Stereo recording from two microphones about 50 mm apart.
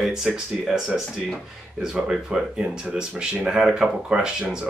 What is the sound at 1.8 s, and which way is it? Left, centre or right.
Speech, centre.